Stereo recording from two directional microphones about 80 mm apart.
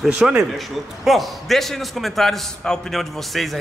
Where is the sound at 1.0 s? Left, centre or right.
Centre.